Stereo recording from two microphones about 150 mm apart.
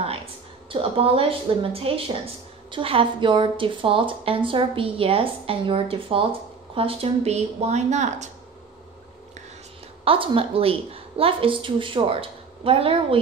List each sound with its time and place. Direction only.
0.7 s a woman's voice: 40° right (ahead or behind)
10.0 s a woman's voice: 35° right (ahead or behind)